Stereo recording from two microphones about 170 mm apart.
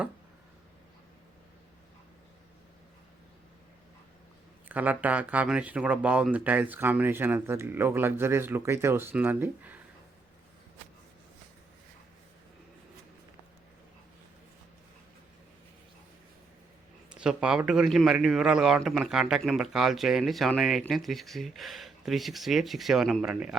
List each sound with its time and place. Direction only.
4.7 s speech: 10° right (ahead or behind)
17.2 s a man's voice: 5° right (ahead or behind)